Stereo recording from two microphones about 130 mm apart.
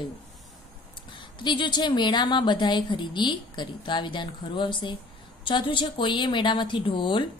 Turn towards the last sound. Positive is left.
turn(degrees=40)  # may be behind; listen again after turning